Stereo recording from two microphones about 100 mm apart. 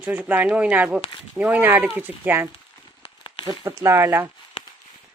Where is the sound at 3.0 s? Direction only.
55° left (ahead or behind).